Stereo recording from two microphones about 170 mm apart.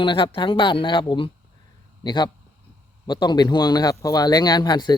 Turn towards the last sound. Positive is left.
turn(degrees=25)  # may be behind; listen again after turning